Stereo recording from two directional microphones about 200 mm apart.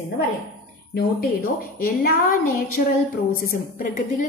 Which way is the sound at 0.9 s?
50° left (ahead or behind).